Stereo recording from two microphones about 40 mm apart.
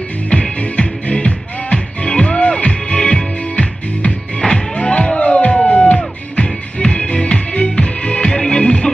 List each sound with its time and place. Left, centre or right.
0.3 s music: left
6.8 s music: left